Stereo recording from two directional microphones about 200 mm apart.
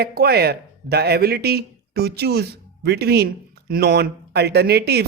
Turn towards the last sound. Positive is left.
turn(degrees=-55)  # may be behind; listen again after turning